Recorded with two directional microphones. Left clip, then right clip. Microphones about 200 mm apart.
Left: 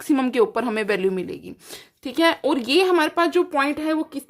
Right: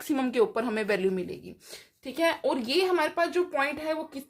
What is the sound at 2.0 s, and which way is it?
Speech, 50° left (ahead or behind).